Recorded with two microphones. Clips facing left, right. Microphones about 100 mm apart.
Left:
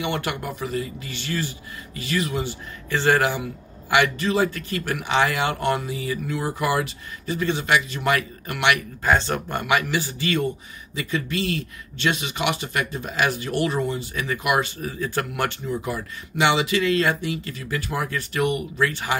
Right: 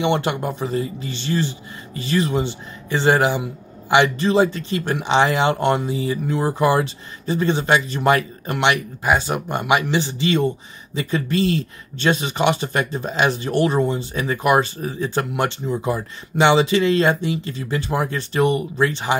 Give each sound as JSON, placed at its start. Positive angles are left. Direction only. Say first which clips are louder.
{"t": 0.0, "sound": "speech", "louder": "right 6 dB", "side_deg": -25}
{"t": 9.0, "sound": "speech", "louder": "right 1 dB", "side_deg": -15}
{"t": 11.0, "sound": "speech", "louder": "right 5 dB", "side_deg": -35}